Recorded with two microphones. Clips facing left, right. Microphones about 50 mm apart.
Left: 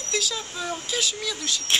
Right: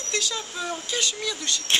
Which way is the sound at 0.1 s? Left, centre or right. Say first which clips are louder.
Left 1 dB; centre.